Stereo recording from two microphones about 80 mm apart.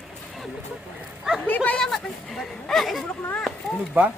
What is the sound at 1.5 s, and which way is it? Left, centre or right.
Speech, centre.